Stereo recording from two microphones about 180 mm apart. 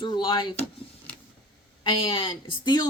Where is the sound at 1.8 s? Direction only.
30° left (ahead or behind).